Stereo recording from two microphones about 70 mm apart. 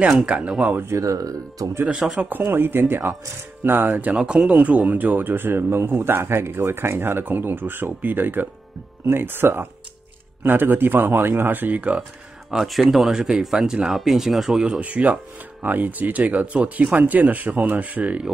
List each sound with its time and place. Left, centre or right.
0.3 s speech: centre
0.9 s speech: right
1.9 s speech: centre
2.1 s speech: right
4.2 s speech: centre
12.4 s speech: centre
14.7 s speech: centre